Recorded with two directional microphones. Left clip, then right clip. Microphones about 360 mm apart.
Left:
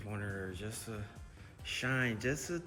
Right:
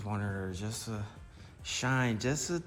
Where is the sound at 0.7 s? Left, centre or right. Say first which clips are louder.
Right 4 dB; centre.